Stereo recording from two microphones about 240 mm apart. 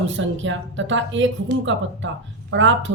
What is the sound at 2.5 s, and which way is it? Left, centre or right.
Speech, right.